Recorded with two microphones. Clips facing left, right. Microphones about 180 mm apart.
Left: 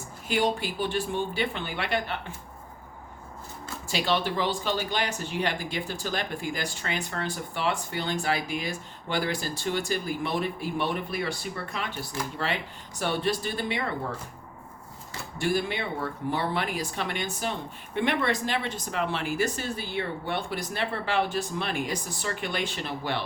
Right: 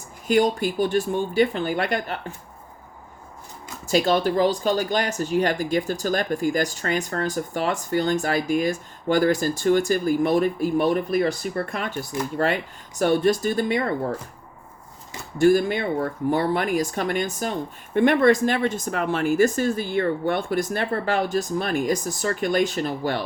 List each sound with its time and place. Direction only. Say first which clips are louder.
0.3 s speech: right 7 dB; 45° right (ahead or behind)
3.8 s speech: right 7 dB; 45° right (ahead or behind)
15.4 s speech: right 10 dB; 45° right (ahead or behind)